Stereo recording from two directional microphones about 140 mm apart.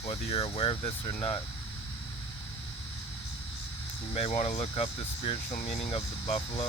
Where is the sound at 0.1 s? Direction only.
40° left (ahead or behind).